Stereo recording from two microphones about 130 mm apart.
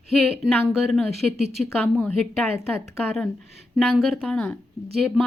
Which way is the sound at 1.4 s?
55° right (ahead or behind).